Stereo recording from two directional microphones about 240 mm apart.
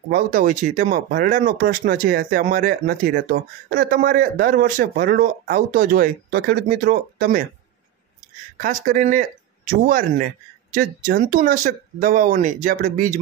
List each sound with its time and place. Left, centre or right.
0.1 s speech: right
8.5 s speech: right